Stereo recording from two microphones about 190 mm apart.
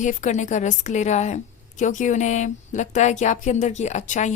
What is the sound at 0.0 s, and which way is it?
A woman's voice, 40° left (ahead or behind).